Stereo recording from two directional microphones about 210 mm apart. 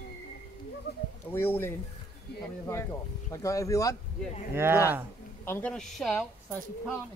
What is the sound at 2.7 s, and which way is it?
Speech, 15° left (ahead or behind).